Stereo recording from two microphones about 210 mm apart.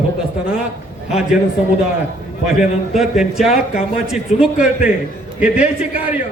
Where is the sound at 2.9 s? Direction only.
Centre (ahead or behind).